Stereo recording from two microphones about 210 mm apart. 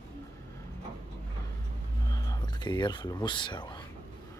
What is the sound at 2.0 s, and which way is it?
Speech, 20° left (ahead or behind).